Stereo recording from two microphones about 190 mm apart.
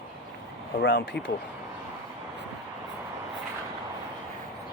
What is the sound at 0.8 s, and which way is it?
Speech, 65° left (ahead or behind).